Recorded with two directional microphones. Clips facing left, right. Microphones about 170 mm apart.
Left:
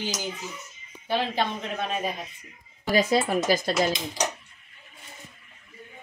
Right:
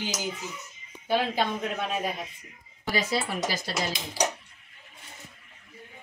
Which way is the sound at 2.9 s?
45° left (ahead or behind).